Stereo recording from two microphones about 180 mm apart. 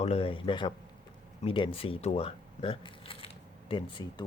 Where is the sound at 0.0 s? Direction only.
35° left (ahead or behind).